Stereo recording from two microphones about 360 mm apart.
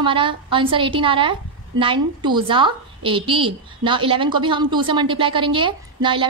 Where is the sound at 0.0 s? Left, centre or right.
Centre.